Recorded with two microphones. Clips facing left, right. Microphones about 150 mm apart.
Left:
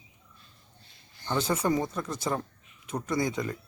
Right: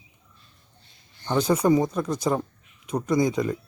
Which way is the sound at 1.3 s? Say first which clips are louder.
Right 7 dB; 15° right (ahead or behind).